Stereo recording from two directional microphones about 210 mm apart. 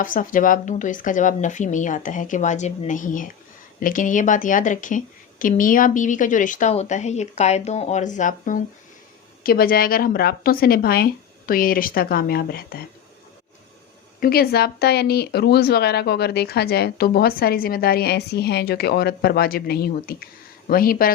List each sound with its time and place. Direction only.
0.0 s a woman's voice: 40° left (ahead or behind)
14.2 s speech: 45° left (ahead or behind)